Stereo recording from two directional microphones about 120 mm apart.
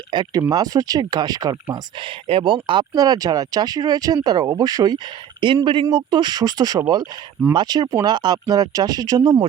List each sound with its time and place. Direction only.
0.1 s speech: 40° right (ahead or behind)
1.7 s speech: 45° right (ahead or behind)
2.9 s speech: 30° right (ahead or behind)
5.4 s speech: 45° right (ahead or behind)